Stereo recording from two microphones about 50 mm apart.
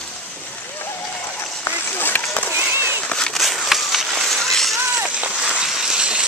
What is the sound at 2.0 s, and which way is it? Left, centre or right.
Run, left.